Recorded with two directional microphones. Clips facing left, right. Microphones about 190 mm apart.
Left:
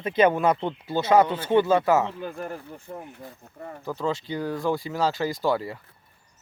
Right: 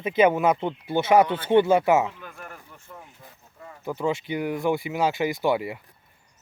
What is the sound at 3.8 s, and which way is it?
Speech, 20° right (ahead or behind).